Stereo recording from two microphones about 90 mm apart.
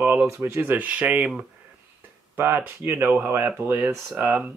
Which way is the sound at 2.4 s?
25° right (ahead or behind).